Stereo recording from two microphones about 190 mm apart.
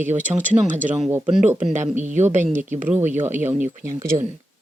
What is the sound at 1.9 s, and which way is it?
Speech, 40° right (ahead or behind).